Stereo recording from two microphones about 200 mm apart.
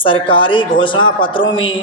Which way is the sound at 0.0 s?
25° left (ahead or behind).